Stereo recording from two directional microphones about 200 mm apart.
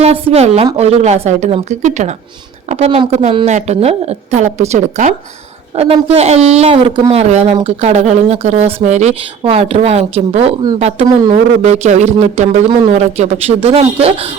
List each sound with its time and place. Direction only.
0.0 s a woman's voice: 30° right (ahead or behind)